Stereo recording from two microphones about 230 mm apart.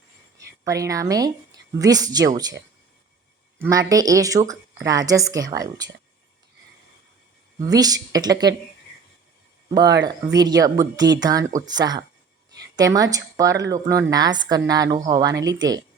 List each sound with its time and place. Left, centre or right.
0.3 s speech: centre
3.6 s speech: centre
7.6 s speech: centre
9.6 s speech: centre